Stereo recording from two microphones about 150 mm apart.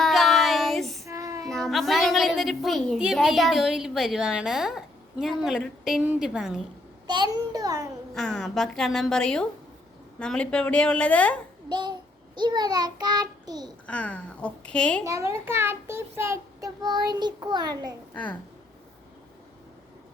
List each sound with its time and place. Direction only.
0.0 s child singing: centre (ahead or behind)
1.0 s child singing: 20° right (ahead or behind)
1.5 s a woman's voice: centre (ahead or behind)
7.1 s a child's voice: 30° right (ahead or behind)
8.1 s a woman's voice: centre (ahead or behind)
11.7 s child singing: 30° right (ahead or behind)
13.8 s a woman's voice: 10° left (ahead or behind)
15.0 s a child's voice: 20° right (ahead or behind)
18.1 s a woman's voice: 10° left (ahead or behind)